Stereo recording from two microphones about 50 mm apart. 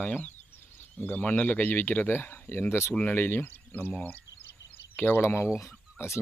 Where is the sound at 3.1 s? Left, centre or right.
Left.